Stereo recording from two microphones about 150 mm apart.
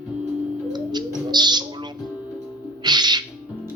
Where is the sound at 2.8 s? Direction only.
30° right (ahead or behind).